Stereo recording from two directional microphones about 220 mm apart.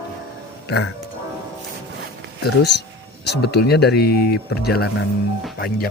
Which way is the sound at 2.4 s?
50° left (ahead or behind).